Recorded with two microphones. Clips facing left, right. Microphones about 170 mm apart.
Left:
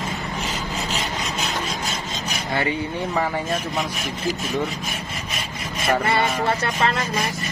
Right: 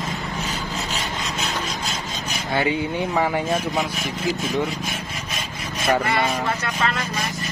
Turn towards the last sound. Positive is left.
turn(degrees=35)  # may be behind; listen again after turning